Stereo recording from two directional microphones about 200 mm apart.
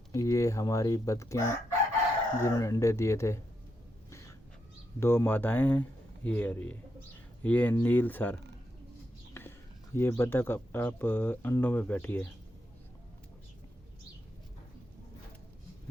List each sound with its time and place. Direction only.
0.1 s speech: 15° left (ahead or behind)
4.9 s speech: 10° left (ahead or behind)